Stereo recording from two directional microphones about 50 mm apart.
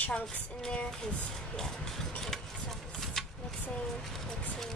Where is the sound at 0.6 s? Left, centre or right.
Centre.